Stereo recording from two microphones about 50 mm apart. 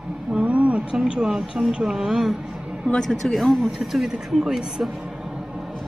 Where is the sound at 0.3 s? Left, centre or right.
Right.